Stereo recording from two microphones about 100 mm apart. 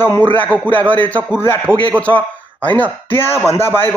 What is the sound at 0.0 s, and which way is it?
A man's voice, 20° left (ahead or behind).